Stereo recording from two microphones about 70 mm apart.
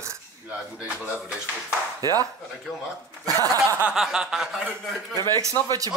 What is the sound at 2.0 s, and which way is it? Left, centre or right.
Speech, right.